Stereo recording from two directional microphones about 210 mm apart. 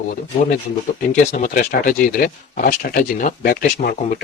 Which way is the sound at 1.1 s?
40° left (ahead or behind).